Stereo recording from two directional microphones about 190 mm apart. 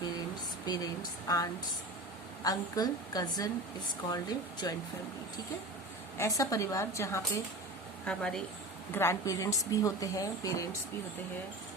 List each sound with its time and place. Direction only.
1.3 s a woman's voice: 20° left (ahead or behind)
6.1 s a woman's voice: 15° left (ahead or behind)
8.0 s a woman's voice: 5° left (ahead or behind)